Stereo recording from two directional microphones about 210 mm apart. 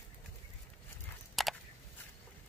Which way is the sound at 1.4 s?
Centre (ahead or behind).